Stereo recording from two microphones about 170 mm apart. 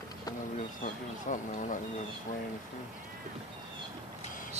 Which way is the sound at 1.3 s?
50° left (ahead or behind).